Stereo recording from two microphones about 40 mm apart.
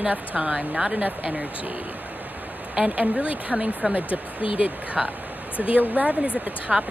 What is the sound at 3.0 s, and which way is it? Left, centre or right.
Speech, right.